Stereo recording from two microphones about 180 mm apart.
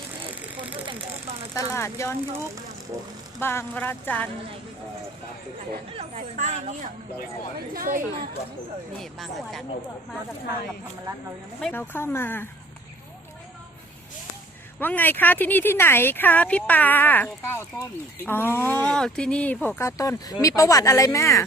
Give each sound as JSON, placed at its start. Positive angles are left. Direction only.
{"t": 1.5, "sound": "speech", "side_deg": 15}
{"t": 3.4, "sound": "speech", "side_deg": 15}
{"t": 6.0, "sound": "speech", "side_deg": -45}
{"t": 7.7, "sound": "speech", "side_deg": -50}
{"t": 9.0, "sound": "speech", "side_deg": 0}
{"t": 11.7, "sound": "speech", "side_deg": 10}
{"t": 14.8, "sound": "speech", "side_deg": 10}